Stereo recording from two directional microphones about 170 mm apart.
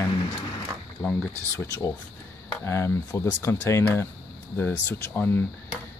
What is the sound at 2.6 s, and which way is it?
Speech, 15° left (ahead or behind).